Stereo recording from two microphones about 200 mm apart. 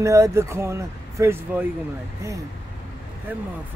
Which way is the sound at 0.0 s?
15° right (ahead or behind).